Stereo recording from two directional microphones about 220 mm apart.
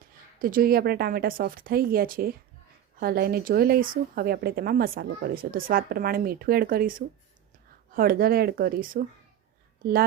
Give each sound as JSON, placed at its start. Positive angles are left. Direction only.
{"t": 0.3, "sound": "speech", "side_deg": -40}
{"t": 7.9, "sound": "speech", "side_deg": -40}